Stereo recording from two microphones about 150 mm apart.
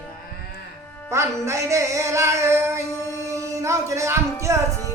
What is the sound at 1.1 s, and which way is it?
Music, 20° right (ahead or behind).